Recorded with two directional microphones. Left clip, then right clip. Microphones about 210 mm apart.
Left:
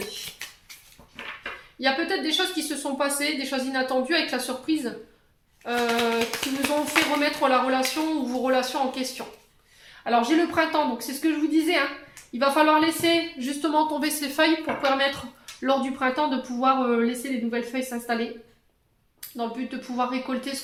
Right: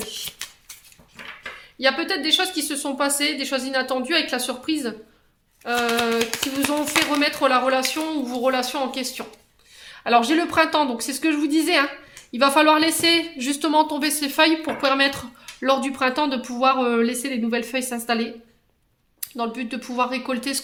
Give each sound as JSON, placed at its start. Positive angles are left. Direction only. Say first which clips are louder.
{"t": 0.4, "sound": "a sound", "louder": "right 3 dB", "side_deg": -35}
{"t": 1.8, "sound": "speech", "louder": "right 3 dB", "side_deg": -40}
{"t": 10.0, "sound": "speech", "louder": "right 3 dB", "side_deg": -50}
{"t": 19.2, "sound": "speech", "louder": "right 3 dB", "side_deg": -45}